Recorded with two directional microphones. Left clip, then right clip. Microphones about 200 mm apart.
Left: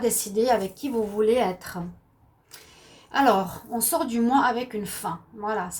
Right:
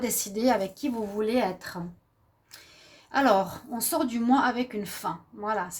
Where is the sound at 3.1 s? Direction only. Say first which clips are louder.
Left 2 dB; 45° right (ahead or behind).